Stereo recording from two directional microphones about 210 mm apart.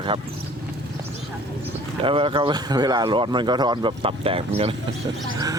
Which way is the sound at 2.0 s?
25° right (ahead or behind).